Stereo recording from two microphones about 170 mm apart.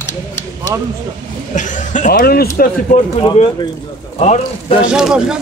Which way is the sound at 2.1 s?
65° left (ahead or behind).